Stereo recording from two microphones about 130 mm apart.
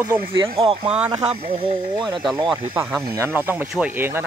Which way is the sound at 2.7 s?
15° right (ahead or behind).